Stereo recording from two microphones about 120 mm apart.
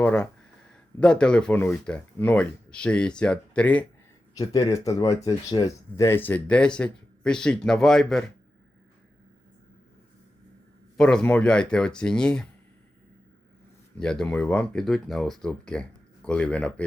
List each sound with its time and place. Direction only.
0.0 s speech: 10° left (ahead or behind)
4.4 s speech: 30° left (ahead or behind)
6.0 s speech: 20° left (ahead or behind); by 8.2 s 5° left (ahead or behind)
10.9 s speech: 5° left (ahead or behind)
14.0 s speech: 5° left (ahead or behind)